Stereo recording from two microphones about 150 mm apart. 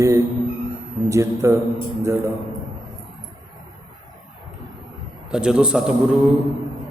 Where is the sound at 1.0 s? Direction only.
20° right (ahead or behind).